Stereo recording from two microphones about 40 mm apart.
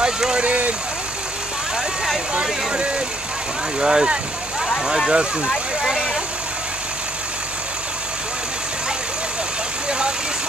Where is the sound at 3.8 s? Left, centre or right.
Centre.